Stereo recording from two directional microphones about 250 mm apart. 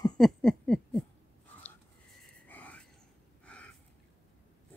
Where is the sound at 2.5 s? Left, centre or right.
Centre.